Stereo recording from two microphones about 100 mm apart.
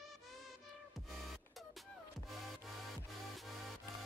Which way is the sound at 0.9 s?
Centre (ahead or behind).